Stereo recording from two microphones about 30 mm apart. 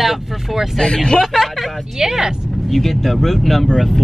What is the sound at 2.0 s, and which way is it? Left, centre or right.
Speech, centre.